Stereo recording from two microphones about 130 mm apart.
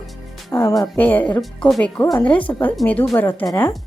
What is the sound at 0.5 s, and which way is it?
Speech, 25° left (ahead or behind).